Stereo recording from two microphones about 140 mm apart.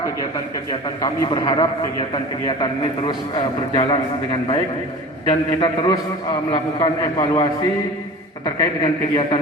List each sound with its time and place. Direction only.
0.7 s a man's voice: 30° left (ahead or behind)